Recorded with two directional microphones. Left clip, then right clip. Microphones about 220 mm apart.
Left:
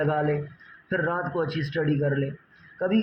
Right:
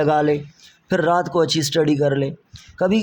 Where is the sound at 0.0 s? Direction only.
35° right (ahead or behind).